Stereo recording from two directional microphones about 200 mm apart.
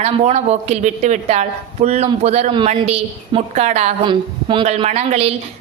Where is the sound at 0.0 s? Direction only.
35° right (ahead or behind).